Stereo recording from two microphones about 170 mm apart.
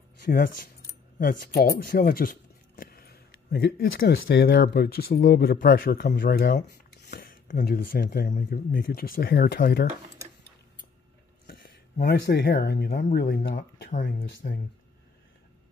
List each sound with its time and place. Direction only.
0.2 s speech: 60° left (ahead or behind); by 6.5 s 75° left (ahead or behind)
7.1 s speech: 65° left (ahead or behind)
11.4 s speech: 70° left (ahead or behind)
14.0 s speech: 90° left